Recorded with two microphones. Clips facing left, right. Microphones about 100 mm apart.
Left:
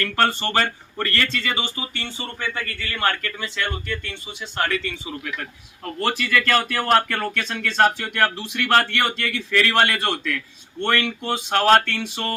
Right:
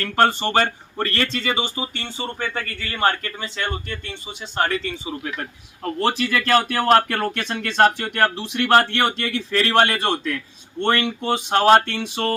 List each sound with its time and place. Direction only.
0.0 s speech: 25° right (ahead or behind)